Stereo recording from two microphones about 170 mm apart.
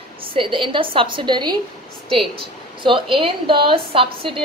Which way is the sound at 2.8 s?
30° right (ahead or behind).